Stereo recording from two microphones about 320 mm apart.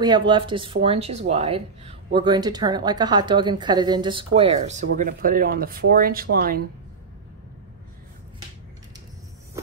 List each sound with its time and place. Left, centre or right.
0.3 s speech: centre